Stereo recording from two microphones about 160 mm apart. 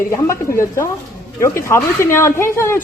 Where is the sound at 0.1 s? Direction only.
15° left (ahead or behind).